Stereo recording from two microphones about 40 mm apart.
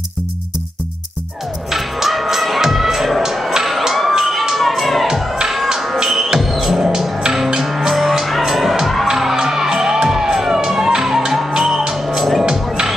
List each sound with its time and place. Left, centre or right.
1.7 s music: centre
3.3 s a sound: centre
4.6 s music: centre
5.0 s music: centre
6.8 s music: centre
12.4 s music: centre